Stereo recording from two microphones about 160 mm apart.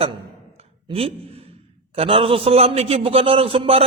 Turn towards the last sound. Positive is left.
turn(degrees=-35)  # may be behind; listen again after turning